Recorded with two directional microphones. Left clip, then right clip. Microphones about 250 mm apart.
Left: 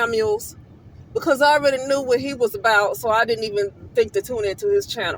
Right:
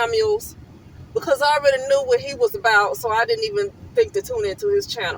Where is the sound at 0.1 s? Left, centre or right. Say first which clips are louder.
Right 1 dB; left.